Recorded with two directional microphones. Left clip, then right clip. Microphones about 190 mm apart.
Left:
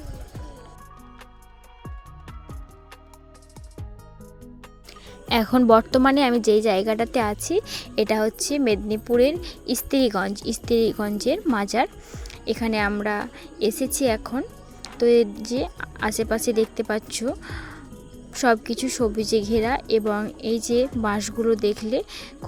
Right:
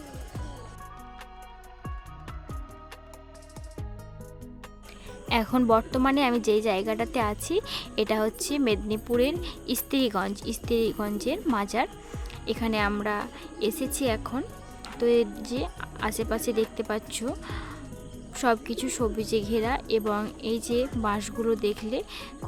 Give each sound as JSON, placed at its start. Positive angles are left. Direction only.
{"t": 1.8, "sound": "music", "side_deg": 0}
{"t": 5.3, "sound": "a woman's voice", "side_deg": 25}